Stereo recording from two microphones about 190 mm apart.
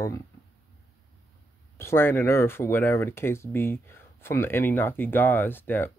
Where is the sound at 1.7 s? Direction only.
10° left (ahead or behind).